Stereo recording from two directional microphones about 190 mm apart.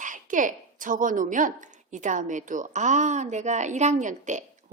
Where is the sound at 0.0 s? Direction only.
40° right (ahead or behind).